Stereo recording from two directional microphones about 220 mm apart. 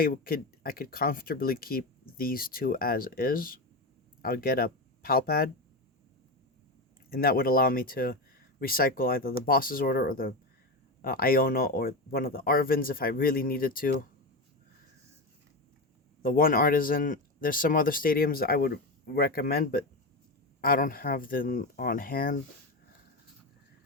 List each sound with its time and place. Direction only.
0.0 s speech: 40° left (ahead or behind)
7.1 s speech: 45° left (ahead or behind)
16.2 s speech: 40° left (ahead or behind)